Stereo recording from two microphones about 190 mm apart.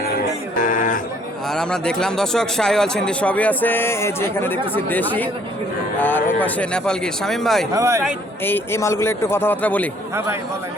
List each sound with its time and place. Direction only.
0.0 s music: 50° left (ahead or behind)
1.5 s speech: 5° left (ahead or behind)
7.7 s speech: 15° right (ahead or behind)
8.4 s a man's voice: 10° left (ahead or behind)